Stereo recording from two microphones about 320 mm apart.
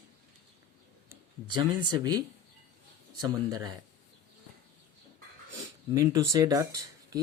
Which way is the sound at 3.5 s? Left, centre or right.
Centre.